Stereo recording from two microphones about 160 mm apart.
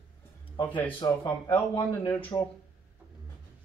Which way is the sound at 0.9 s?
30° left (ahead or behind).